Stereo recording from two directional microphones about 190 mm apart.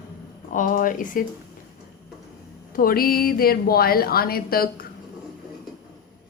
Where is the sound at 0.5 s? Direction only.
45° left (ahead or behind).